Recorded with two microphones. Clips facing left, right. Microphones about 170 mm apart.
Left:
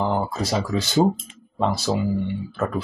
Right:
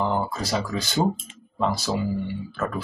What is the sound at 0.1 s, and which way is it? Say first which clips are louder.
Speech: left 2 dB; 25° left (ahead or behind).